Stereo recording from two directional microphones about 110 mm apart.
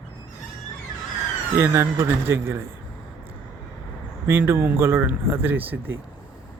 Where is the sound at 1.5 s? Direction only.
25° right (ahead or behind).